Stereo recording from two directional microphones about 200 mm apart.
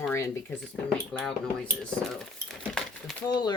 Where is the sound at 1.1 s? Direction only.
Centre (ahead or behind).